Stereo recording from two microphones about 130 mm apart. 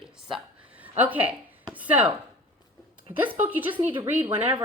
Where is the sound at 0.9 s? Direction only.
10° right (ahead or behind).